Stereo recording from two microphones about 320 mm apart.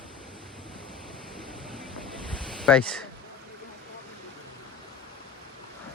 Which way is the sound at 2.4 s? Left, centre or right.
Centre.